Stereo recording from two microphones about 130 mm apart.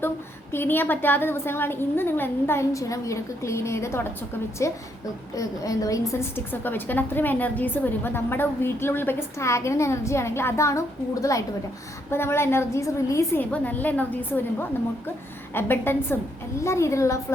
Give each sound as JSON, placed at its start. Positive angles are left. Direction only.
{"t": 0.5, "sound": "a woman's voice", "side_deg": 15}
{"t": 15.5, "sound": "a woman's voice", "side_deg": 15}